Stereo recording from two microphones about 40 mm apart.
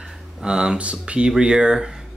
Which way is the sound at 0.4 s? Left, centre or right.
Centre.